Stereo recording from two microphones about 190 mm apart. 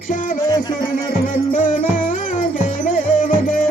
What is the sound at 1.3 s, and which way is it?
Music, 45° left (ahead or behind).